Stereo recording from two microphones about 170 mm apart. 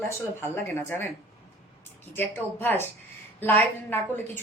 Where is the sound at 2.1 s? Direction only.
10° left (ahead or behind).